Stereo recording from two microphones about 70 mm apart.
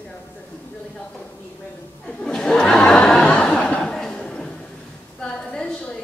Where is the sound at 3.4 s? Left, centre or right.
Centre.